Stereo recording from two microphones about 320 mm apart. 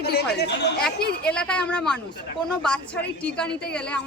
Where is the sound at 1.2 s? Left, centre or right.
Centre.